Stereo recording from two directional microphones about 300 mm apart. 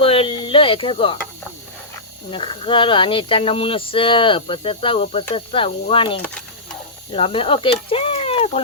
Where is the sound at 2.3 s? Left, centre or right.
Centre.